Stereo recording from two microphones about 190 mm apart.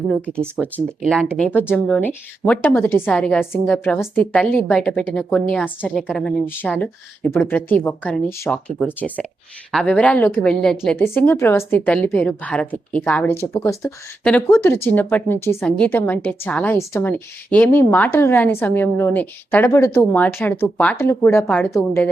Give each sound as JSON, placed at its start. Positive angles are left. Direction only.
{"t": 0.1, "sound": "speech", "side_deg": 5}